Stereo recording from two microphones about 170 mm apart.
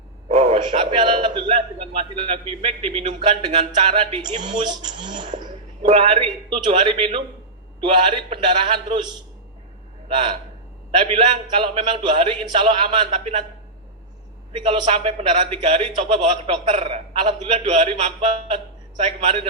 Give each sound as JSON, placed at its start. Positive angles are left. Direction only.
{"t": 0.3, "sound": "a man's voice", "side_deg": -40}
{"t": 4.4, "sound": "speech", "side_deg": -25}
{"t": 5.2, "sound": "a man's voice", "side_deg": -45}
{"t": 10.9, "sound": "a man's voice", "side_deg": -30}
{"t": 14.8, "sound": "a man's voice", "side_deg": -35}